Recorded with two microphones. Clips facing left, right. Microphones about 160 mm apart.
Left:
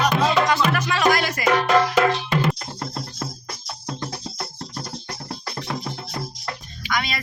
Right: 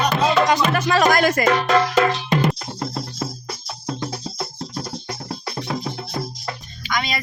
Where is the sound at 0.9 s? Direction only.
45° right (ahead or behind).